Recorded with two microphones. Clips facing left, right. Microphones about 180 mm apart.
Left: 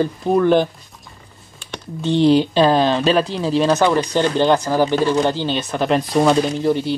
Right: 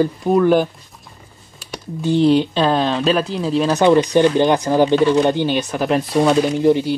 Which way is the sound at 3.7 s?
20° right (ahead or behind).